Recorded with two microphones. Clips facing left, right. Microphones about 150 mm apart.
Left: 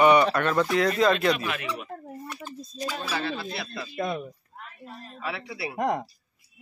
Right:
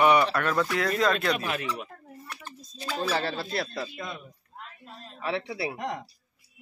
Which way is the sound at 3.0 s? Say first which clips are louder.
Right 5 dB; 35° right (ahead or behind).